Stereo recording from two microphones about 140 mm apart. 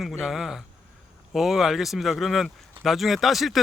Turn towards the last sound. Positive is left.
turn(degrees=0)  # may be behind; listen again after turning